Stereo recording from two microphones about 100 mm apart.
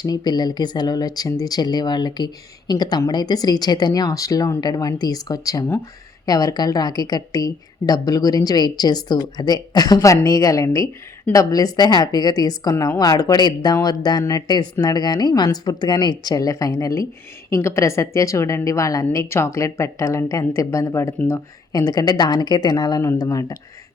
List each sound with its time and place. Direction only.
0.0 s a woman's voice: 45° left (ahead or behind); by 21.4 s 25° left (ahead or behind)
21.7 s a woman's voice: 40° left (ahead or behind)